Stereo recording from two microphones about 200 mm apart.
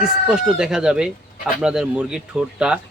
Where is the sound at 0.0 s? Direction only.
5° right (ahead or behind).